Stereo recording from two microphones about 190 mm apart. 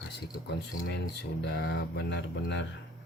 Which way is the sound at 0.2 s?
60° left (ahead or behind).